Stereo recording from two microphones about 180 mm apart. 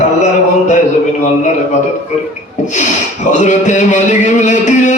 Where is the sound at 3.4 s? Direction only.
40° left (ahead or behind).